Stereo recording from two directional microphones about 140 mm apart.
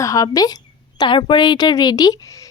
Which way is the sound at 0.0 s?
25° left (ahead or behind).